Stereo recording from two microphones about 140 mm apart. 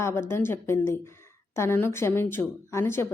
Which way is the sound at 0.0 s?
15° left (ahead or behind).